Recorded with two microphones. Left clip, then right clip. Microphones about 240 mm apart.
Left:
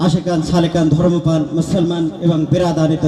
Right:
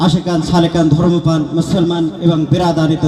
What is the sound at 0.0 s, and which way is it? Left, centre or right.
A man's voice, right.